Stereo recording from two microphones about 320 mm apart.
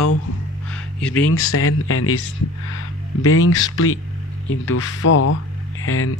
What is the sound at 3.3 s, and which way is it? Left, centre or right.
Speech, left.